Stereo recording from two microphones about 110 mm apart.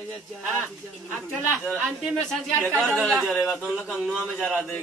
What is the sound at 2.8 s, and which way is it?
A man's voice, 5° left (ahead or behind).